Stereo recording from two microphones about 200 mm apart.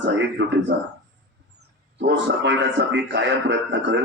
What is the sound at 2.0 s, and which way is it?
A man's voice, 60° right (ahead or behind).